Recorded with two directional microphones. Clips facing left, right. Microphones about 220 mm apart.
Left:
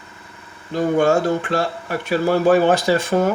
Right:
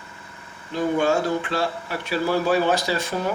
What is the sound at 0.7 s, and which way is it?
Speech, 50° left (ahead or behind).